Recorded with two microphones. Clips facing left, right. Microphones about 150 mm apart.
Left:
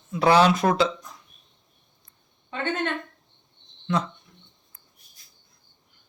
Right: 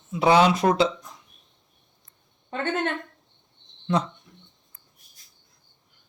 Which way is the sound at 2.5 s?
45° right (ahead or behind).